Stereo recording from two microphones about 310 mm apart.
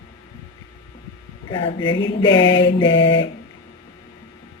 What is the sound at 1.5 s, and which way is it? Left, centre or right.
Mantra, centre.